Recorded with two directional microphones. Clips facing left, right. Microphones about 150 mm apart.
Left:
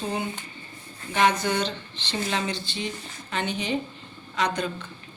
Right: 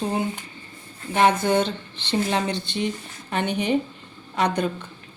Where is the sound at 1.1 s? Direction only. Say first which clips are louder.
Right 4 dB; 55° right (ahead or behind).